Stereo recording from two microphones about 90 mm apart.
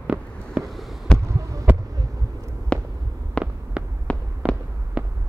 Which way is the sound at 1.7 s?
20° right (ahead or behind).